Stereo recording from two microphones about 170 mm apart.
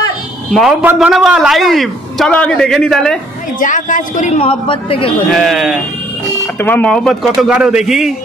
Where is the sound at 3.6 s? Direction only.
50° left (ahead or behind); by 5.1 s 35° left (ahead or behind).